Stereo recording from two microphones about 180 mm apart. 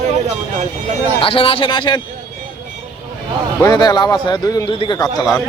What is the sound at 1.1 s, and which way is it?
Speech, 30° left (ahead or behind).